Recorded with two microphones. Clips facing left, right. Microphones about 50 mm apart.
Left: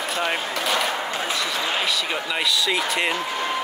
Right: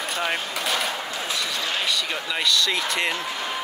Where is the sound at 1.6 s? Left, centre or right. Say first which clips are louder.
Left 3 dB; centre.